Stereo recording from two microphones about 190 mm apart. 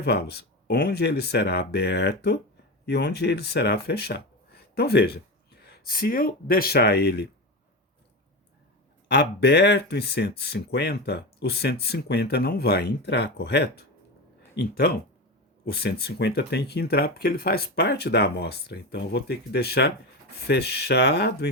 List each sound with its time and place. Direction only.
0.0 s speech: 60° left (ahead or behind)
9.0 s speech: 60° left (ahead or behind)